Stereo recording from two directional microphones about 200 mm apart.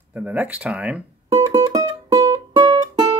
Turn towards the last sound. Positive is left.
turn(degrees=-20)  # may be behind; listen again after turning